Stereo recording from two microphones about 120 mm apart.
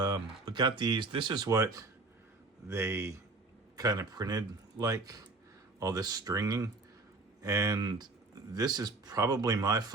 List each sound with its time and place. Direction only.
0.0 s speech: 35° right (ahead or behind)
1.5 s speech: 25° right (ahead or behind)